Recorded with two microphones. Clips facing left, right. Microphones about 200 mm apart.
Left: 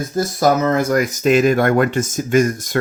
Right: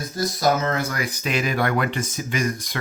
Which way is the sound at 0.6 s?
45° left (ahead or behind).